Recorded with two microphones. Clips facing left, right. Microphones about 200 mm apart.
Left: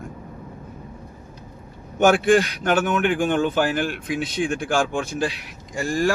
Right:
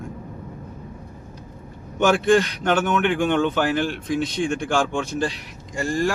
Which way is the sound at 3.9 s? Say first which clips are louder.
Right 2 dB; 5° left (ahead or behind).